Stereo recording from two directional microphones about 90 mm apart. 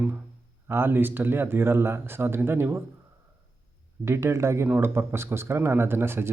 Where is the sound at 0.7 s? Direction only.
25° right (ahead or behind).